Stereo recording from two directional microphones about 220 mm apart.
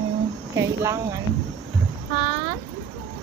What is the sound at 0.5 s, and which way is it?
Speech, 15° right (ahead or behind).